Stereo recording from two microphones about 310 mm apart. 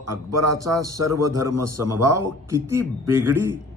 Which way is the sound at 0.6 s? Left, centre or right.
Centre.